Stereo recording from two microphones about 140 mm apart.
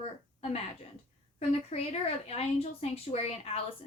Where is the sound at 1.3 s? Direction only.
45° left (ahead or behind).